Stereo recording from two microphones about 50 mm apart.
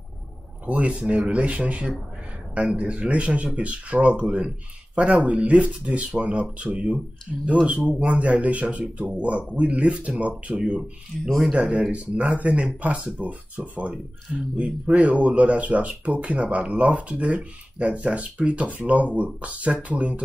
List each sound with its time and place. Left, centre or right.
0.7 s speech: right
7.3 s speech: centre
7.6 s speech: right
11.2 s speech: centre
11.5 s speech: centre